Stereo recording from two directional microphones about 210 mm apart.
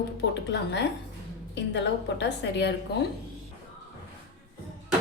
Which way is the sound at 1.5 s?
55° left (ahead or behind).